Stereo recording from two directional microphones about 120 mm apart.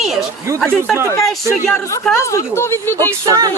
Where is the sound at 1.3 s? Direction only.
5° left (ahead or behind).